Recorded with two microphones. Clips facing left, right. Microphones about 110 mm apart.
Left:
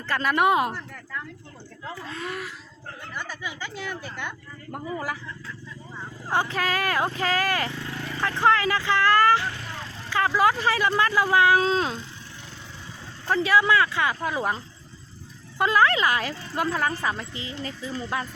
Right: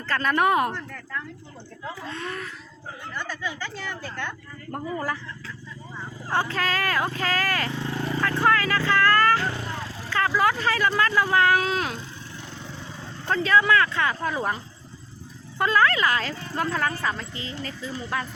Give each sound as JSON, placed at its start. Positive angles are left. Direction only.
{"t": 0.1, "sound": "speech", "side_deg": 10}
{"t": 2.0, "sound": "speech", "side_deg": 5}
{"t": 6.3, "sound": "speech", "side_deg": 15}
{"t": 7.8, "sound": "a sound", "side_deg": -25}
{"t": 8.2, "sound": "speech", "side_deg": 20}
{"t": 9.4, "sound": "vehicle", "side_deg": -30}
{"t": 10.1, "sound": "speech", "side_deg": 15}
{"t": 11.6, "sound": "speech", "side_deg": 30}
{"t": 13.2, "sound": "speech", "side_deg": 10}
{"t": 15.5, "sound": "speech", "side_deg": 15}